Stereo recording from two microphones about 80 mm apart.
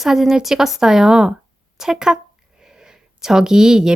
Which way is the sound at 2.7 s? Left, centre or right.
Centre.